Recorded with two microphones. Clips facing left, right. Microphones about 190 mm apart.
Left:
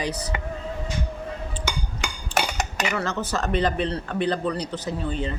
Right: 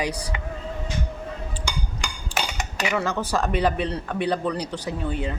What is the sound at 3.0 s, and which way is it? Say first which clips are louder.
Speech: right 2 dB; 10° right (ahead or behind).